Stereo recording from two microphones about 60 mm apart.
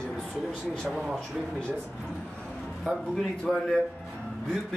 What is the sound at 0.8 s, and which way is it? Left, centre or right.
Speech, centre.